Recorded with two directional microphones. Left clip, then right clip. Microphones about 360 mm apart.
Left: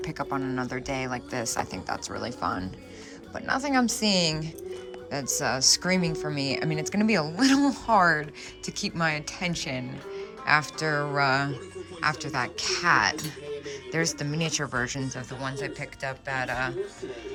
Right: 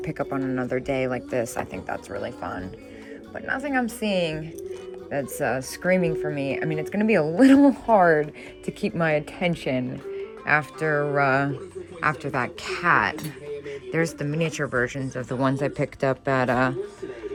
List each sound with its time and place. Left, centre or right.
0.0 s speech: centre
4.0 s a woman's voice: left
5.1 s speech: centre